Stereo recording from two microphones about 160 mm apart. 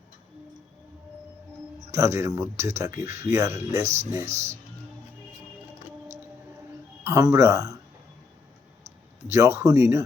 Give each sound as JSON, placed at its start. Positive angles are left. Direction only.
{"t": 1.9, "sound": "speech", "side_deg": -15}
{"t": 7.0, "sound": "speech", "side_deg": -20}
{"t": 9.2, "sound": "speech", "side_deg": -20}